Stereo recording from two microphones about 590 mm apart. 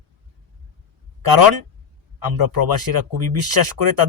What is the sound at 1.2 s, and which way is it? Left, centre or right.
Speech, right.